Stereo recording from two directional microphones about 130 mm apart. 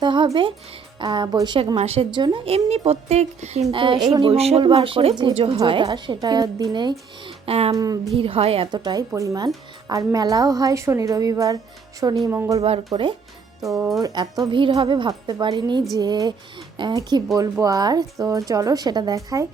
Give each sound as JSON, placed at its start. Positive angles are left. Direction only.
{"t": 0.0, "sound": "a woman's voice", "side_deg": -35}
{"t": 1.7, "sound": "a woman's voice", "side_deg": -50}
{"t": 2.1, "sound": "a woman's voice", "side_deg": -35}
{"t": 3.7, "sound": "a woman's voice", "side_deg": -40}
{"t": 4.3, "sound": "a woman's voice", "side_deg": -50}
{"t": 7.3, "sound": "a sound", "side_deg": -50}
{"t": 7.7, "sound": "a woman's voice", "side_deg": -30}
{"t": 8.1, "sound": "a woman's voice", "side_deg": -45}
{"t": 12.9, "sound": "a woman's voice", "side_deg": -40}